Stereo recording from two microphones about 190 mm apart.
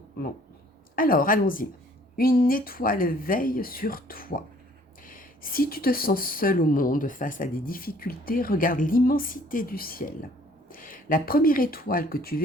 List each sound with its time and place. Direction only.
0.9 s speech: 50° left (ahead or behind)